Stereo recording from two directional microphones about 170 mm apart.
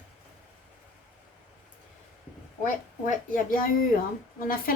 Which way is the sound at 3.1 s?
50° left (ahead or behind).